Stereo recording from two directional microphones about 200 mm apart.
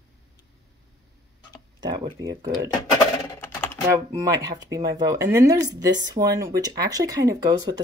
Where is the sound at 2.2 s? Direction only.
15° right (ahead or behind).